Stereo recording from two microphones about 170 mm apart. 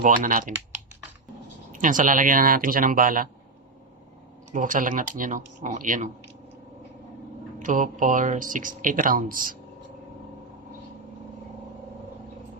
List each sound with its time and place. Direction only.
0.0 s speech: 50° right (ahead or behind)
1.7 s speech: 50° right (ahead or behind)
4.5 s speech: 50° right (ahead or behind)
7.6 s speech: 50° right (ahead or behind)